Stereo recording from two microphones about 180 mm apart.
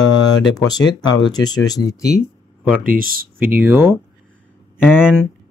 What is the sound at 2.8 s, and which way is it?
Speech, 50° right (ahead or behind).